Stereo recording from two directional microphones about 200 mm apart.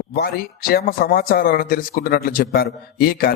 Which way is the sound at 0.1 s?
50° left (ahead or behind).